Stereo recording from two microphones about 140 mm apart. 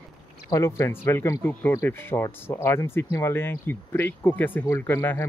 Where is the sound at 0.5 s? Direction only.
20° left (ahead or behind).